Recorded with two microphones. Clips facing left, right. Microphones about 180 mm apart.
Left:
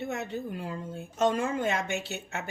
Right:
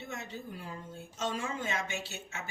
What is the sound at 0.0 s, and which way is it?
Speech, 60° left (ahead or behind).